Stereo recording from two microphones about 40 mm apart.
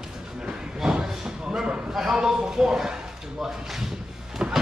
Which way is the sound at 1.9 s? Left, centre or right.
Centre.